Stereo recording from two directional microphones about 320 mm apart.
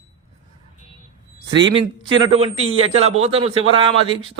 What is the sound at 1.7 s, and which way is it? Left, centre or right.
Speech, centre.